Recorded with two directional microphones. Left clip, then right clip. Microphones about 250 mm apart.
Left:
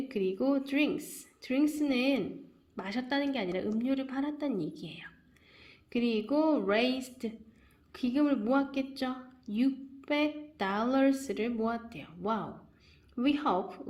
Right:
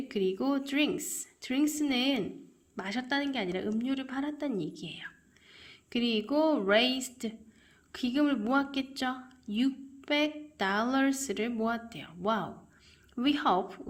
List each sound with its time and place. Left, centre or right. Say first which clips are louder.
0.1 s a woman's voice: even; centre